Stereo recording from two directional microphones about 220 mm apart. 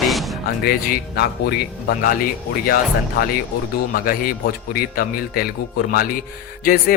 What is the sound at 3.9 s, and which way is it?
Speech, 40° left (ahead or behind).